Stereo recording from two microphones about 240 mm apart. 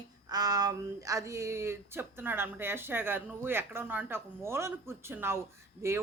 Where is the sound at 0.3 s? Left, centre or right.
Centre.